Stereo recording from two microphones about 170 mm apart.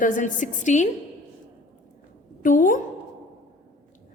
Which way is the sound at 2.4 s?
50° left (ahead or behind).